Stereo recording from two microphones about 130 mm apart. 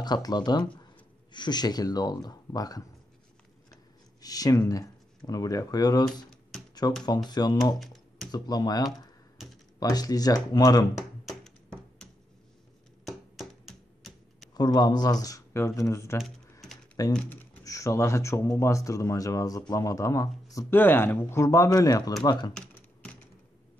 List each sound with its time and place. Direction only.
0.0 s speech: 30° left (ahead or behind)
4.2 s speech: 30° left (ahead or behind)
7.8 s computer keyboard: centre (ahead or behind)
8.3 s speech: 30° left (ahead or behind)
13.0 s a sound: centre (ahead or behind)
14.5 s speech: 30° left (ahead or behind)
22.5 s typing: 5° left (ahead or behind)